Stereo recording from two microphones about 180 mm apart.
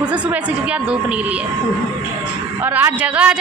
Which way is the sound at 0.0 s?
10° right (ahead or behind).